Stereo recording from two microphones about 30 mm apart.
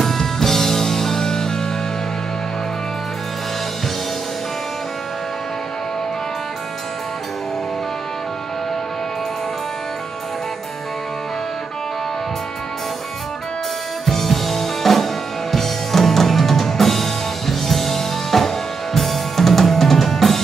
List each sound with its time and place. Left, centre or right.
0.0 s music: centre
14.0 s music: centre